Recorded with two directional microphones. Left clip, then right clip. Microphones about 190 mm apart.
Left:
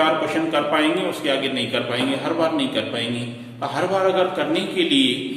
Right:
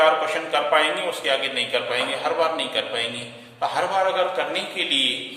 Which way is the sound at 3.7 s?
20° right (ahead or behind).